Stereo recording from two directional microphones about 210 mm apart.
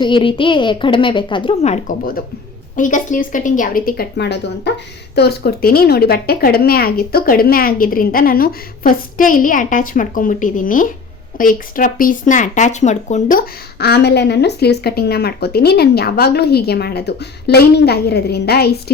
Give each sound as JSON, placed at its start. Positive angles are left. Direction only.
{"t": 0.0, "sound": "a woman's voice", "side_deg": 25}